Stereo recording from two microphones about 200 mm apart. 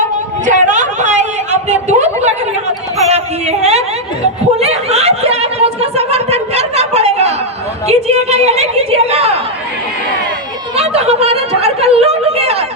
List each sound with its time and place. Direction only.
0.4 s a sound: 35° right (ahead or behind)
3.1 s a woman's voice: 35° right (ahead or behind)
4.6 s snicker: 30° right (ahead or behind)
7.9 s a woman's voice: 30° right (ahead or behind)
10.8 s speech: 30° right (ahead or behind)